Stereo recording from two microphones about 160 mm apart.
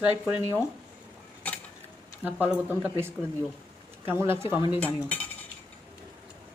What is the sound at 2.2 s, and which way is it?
Speech, 10° right (ahead or behind).